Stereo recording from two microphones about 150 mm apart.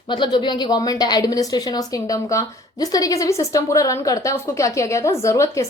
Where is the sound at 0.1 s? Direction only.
30° left (ahead or behind).